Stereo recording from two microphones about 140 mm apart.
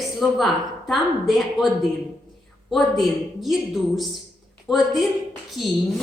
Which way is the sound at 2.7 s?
Centre (ahead or behind).